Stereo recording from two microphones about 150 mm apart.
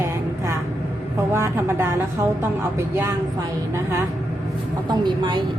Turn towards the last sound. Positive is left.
turn(degrees=-30)  # may be behind; listen again after turning